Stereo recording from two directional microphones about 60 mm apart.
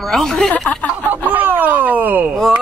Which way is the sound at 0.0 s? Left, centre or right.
Centre.